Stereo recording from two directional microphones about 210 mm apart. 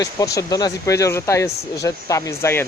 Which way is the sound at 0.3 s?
15° left (ahead or behind).